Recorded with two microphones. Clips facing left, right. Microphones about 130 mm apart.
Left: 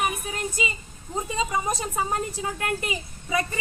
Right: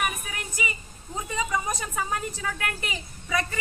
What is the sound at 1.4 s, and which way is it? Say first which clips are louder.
A woman's voice: left 2 dB; 25° left (ahead or behind).